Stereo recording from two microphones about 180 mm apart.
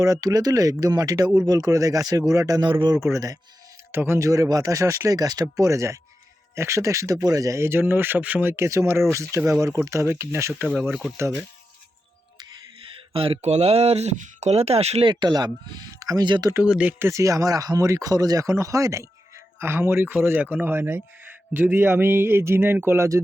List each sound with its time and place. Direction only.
0.0 s a man's voice: 20° right (ahead or behind)
10.8 s speech: 5° right (ahead or behind)
13.1 s speech: 30° right (ahead or behind)
16.6 s speech: 5° right (ahead or behind)